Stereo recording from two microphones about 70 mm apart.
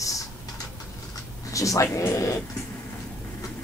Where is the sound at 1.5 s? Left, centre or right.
Left.